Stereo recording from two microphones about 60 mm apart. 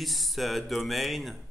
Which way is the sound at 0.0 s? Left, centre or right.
Centre.